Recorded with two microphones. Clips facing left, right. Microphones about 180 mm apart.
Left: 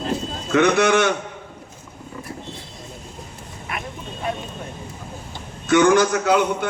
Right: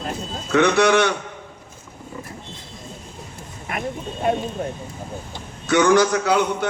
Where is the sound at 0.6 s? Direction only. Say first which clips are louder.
Even; 50° left (ahead or behind).